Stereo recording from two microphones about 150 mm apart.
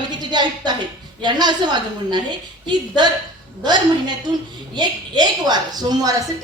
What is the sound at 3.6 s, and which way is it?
A woman's voice, 30° right (ahead or behind).